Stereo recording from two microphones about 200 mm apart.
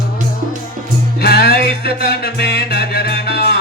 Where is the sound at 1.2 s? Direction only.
55° left (ahead or behind).